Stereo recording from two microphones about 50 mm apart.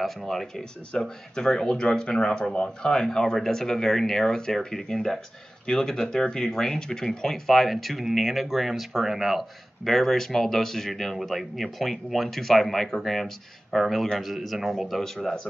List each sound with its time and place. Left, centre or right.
0.0 s speech: centre
0.9 s speech: centre